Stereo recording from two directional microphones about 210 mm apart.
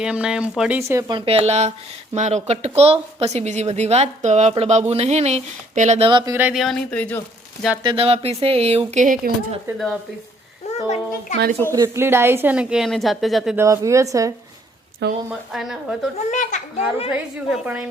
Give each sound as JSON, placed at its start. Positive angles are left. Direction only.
{"t": 0.0, "sound": "a woman's voice", "side_deg": -5}
{"t": 6.1, "sound": "speech", "side_deg": -20}
{"t": 6.3, "sound": "speech", "side_deg": -5}
{"t": 7.9, "sound": "speech", "side_deg": -25}
{"t": 9.7, "sound": "speech", "side_deg": 0}
{"t": 10.8, "sound": "a child's voice", "side_deg": 30}
{"t": 11.6, "sound": "a woman's voice", "side_deg": -15}
{"t": 13.7, "sound": "a woman's voice", "side_deg": -15}
{"t": 15.3, "sound": "speech", "side_deg": 0}
{"t": 16.1, "sound": "a child's voice", "side_deg": 35}
{"t": 17.1, "sound": "speech", "side_deg": -5}